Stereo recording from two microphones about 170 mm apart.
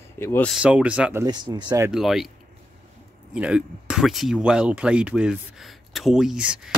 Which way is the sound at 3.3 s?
5° right (ahead or behind).